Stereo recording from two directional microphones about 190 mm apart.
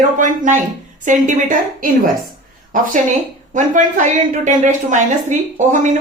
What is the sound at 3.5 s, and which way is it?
Speech, 40° right (ahead or behind).